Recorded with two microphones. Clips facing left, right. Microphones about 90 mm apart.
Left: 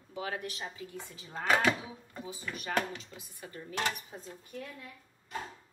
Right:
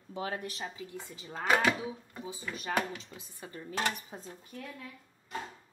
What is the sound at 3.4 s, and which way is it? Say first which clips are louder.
Dishes: right 1 dB; 30° right (ahead or behind).